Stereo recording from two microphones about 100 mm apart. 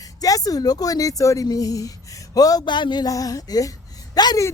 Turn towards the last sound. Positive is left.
turn(degrees=45)  # may be behind; listen again after turning